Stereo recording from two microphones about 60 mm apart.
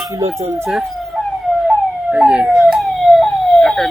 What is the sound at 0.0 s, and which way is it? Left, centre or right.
Speech, right.